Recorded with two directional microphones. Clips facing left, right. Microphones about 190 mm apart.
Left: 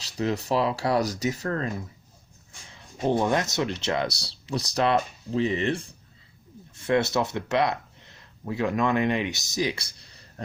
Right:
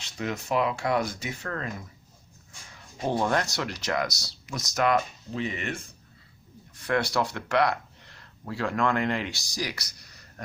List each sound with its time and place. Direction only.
0.2 s speech: 35° left (ahead or behind)
3.1 s speech: 20° left (ahead or behind)